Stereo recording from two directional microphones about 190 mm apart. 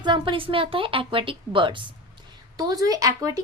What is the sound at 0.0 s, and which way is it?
A woman's voice, 25° right (ahead or behind).